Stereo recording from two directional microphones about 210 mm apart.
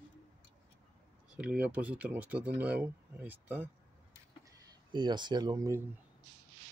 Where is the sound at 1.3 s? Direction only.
5° right (ahead or behind).